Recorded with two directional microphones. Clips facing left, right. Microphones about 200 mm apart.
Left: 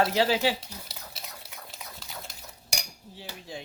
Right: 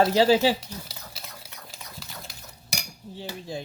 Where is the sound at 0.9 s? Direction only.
Centre (ahead or behind).